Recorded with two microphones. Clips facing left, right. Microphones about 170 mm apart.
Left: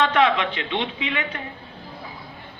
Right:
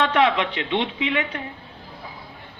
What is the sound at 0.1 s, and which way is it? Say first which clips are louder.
Speech: even; 15° right (ahead or behind).